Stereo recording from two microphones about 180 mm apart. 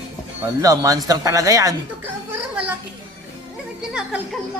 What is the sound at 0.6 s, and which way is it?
Speech, 20° right (ahead or behind).